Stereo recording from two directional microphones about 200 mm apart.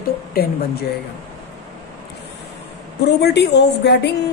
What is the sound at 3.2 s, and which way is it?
Speech, 55° left (ahead or behind).